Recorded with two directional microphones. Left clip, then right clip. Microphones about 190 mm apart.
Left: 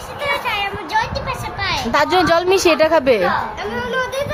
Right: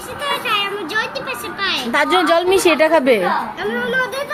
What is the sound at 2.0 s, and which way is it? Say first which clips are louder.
A woman's voice: right 1 dB; 25° left (ahead or behind).